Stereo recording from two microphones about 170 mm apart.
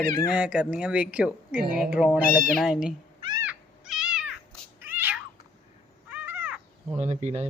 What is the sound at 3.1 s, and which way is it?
Cat, 25° right (ahead or behind).